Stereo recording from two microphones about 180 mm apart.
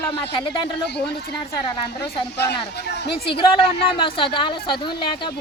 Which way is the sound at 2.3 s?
65° left (ahead or behind).